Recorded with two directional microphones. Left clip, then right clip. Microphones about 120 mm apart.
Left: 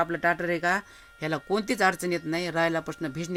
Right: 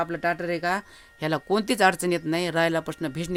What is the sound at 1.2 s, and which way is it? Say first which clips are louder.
Speech: right 3 dB; 25° right (ahead or behind).